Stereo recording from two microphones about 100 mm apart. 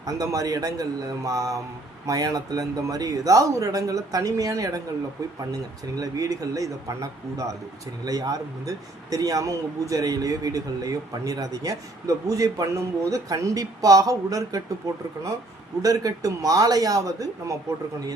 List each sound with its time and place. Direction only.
0.0 s speech: 35° right (ahead or behind)
6.0 s speech: 35° right (ahead or behind)
15.8 s speech: 35° right (ahead or behind)